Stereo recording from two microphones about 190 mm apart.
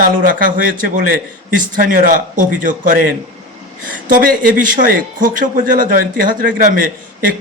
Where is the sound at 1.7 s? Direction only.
45° right (ahead or behind).